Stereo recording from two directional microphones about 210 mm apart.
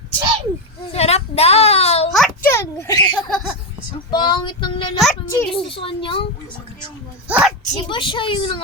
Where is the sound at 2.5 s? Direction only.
15° left (ahead or behind).